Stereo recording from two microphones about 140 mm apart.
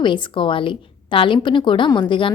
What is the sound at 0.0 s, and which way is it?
A woman's voice, 35° left (ahead or behind).